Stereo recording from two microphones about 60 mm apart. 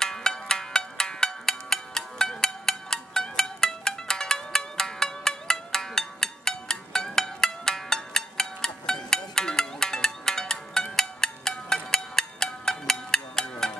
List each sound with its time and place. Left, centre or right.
0.0 s music: centre